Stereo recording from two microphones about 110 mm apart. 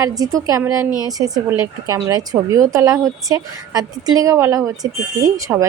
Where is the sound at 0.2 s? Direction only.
30° right (ahead or behind).